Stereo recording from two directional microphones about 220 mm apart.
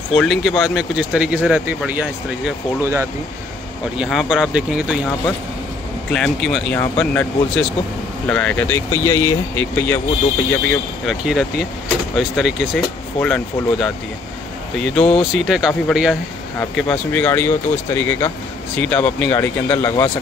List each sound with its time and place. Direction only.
0.1 s speech: centre (ahead or behind)
3.9 s speech: centre (ahead or behind)
6.1 s speech: centre (ahead or behind)
15.3 s speech: centre (ahead or behind)